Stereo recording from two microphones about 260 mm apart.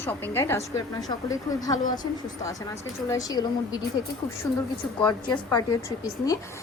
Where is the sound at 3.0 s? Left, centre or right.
Centre.